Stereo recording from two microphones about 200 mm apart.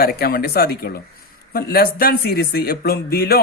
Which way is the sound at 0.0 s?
50° left (ahead or behind).